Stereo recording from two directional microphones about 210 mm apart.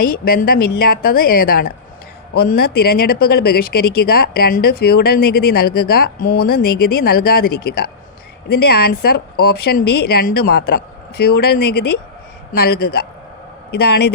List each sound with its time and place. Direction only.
0.0 s speech: 45° left (ahead or behind)
12.5 s speech: 50° left (ahead or behind)